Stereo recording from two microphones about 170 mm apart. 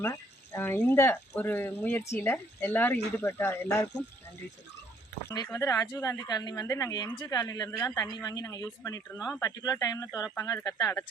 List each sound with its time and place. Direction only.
0.0 s speech: 15° left (ahead or behind)
5.3 s speech: 20° left (ahead or behind)